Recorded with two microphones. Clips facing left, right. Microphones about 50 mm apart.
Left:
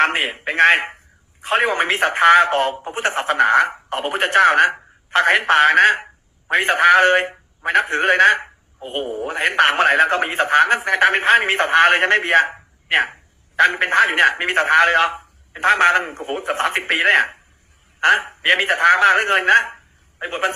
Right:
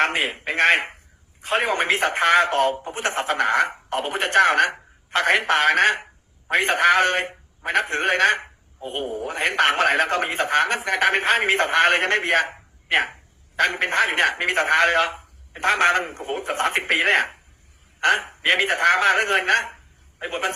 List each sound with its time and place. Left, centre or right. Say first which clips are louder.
0.0 s a man's voice: left 4 dB; left